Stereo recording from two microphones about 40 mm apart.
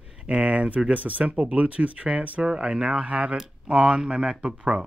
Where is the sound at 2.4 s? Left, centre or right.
Right.